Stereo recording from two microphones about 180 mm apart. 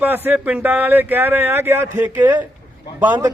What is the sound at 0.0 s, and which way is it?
Speech, 10° right (ahead or behind).